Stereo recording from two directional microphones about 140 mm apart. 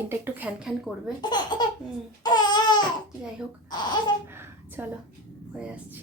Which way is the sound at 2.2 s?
30° left (ahead or behind).